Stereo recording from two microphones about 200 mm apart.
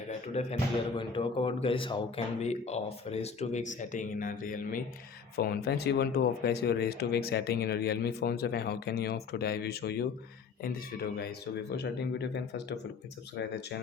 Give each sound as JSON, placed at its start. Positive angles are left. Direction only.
{"t": 0.4, "sound": "speech", "side_deg": 30}